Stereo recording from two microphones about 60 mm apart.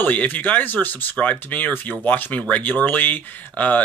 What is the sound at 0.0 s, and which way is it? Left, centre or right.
Speech, left.